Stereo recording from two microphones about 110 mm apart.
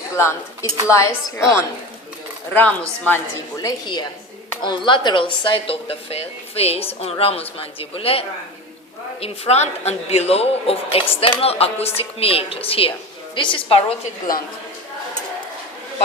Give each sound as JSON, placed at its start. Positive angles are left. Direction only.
{"t": 0.2, "sound": "speech", "side_deg": 25}
{"t": 2.5, "sound": "speech", "side_deg": 10}
{"t": 3.6, "sound": "a woman's voice", "side_deg": 35}
{"t": 9.2, "sound": "a woman's voice", "side_deg": 70}